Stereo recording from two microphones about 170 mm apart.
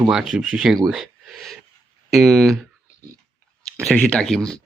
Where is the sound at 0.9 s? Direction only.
Centre (ahead or behind).